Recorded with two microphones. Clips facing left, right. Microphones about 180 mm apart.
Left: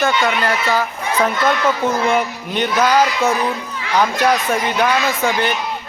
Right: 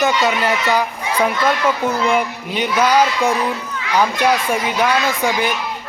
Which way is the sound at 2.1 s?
10° right (ahead or behind).